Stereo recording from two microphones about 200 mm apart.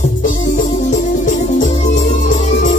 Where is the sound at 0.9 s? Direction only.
40° left (ahead or behind).